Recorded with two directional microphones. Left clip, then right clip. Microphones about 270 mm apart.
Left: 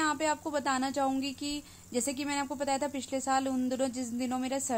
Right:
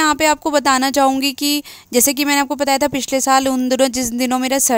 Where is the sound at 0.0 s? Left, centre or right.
Right.